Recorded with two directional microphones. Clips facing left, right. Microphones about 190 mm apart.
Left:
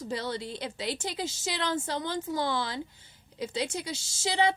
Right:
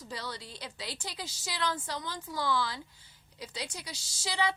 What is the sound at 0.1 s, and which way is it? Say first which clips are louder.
A woman's voice: left 8 dB; 25° left (ahead or behind).